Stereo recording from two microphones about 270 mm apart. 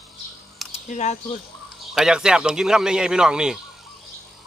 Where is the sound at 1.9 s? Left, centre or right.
Centre.